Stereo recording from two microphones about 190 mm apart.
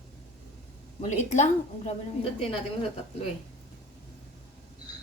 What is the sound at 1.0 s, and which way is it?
A woman's voice, 35° left (ahead or behind).